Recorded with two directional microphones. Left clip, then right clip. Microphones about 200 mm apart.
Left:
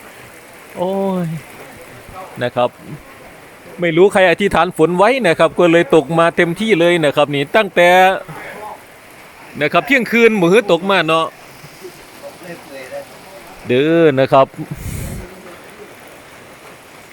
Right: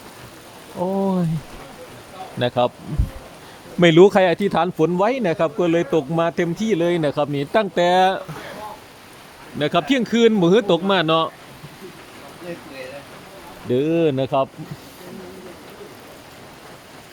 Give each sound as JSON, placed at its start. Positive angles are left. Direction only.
{"t": 0.8, "sound": "speech", "side_deg": 0}
{"t": 2.4, "sound": "speech", "side_deg": -5}
{"t": 3.8, "sound": "speech", "side_deg": -20}
{"t": 4.1, "sound": "speech", "side_deg": 0}
{"t": 9.6, "sound": "speech", "side_deg": 0}
{"t": 13.7, "sound": "speech", "side_deg": 5}